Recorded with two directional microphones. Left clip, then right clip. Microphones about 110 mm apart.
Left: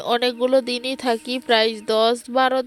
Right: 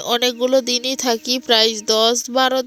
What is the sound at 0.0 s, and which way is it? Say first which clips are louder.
Speech: right 2 dB; 15° right (ahead or behind).